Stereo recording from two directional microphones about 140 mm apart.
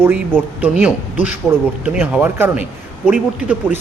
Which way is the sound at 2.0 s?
10° right (ahead or behind).